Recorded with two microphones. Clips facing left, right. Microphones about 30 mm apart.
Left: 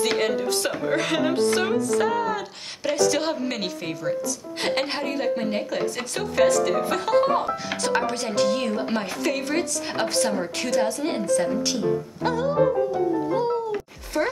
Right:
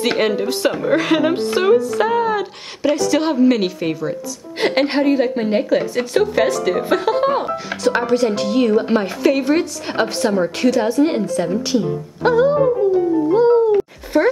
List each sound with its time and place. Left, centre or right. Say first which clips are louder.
0.0 s a woman's voice: right 5 dB; right
2.8 s a woman's voice: right 5 dB; centre; by 12.5 s right
13.3 s a sound: right 11 dB; centre